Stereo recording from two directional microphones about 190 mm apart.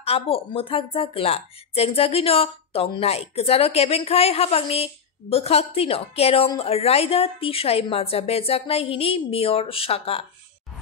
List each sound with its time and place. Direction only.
0.0 s speech: 30° left (ahead or behind)